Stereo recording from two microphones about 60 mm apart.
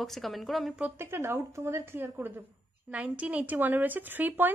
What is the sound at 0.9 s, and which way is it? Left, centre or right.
Speech, right.